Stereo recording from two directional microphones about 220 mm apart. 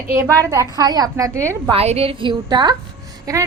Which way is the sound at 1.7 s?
25° right (ahead or behind).